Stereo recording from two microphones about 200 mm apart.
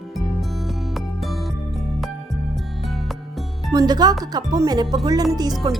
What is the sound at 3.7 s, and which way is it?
Speech, 20° right (ahead or behind).